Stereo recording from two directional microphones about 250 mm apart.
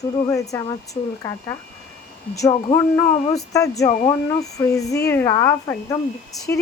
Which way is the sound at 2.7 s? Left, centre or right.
Centre.